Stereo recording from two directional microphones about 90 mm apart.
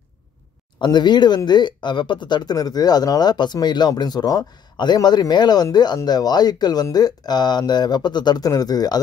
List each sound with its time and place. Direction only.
0.7 s speech: 55° left (ahead or behind)